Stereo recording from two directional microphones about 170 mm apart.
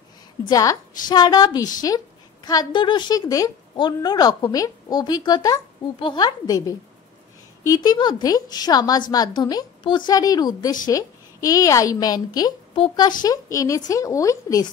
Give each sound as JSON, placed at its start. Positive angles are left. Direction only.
{"t": 0.5, "sound": "a woman's voice", "side_deg": 20}